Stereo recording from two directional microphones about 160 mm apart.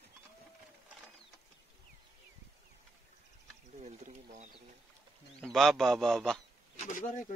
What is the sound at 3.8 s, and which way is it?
Speech, 45° right (ahead or behind).